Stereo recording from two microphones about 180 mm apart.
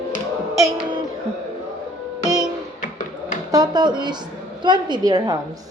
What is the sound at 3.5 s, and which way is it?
A woman's voice, 20° right (ahead or behind).